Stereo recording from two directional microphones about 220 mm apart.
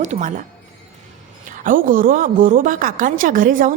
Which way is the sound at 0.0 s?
35° right (ahead or behind).